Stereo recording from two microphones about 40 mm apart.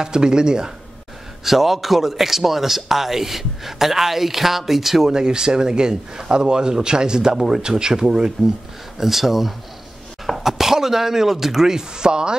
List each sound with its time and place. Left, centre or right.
0.0 s speech: centre
1.4 s speech: centre
5.1 s speech: centre